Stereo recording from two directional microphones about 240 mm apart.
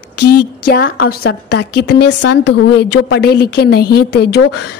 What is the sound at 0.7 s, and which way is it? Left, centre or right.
A woman's voice, left.